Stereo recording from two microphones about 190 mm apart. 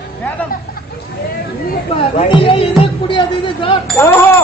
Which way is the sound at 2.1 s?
25° left (ahead or behind).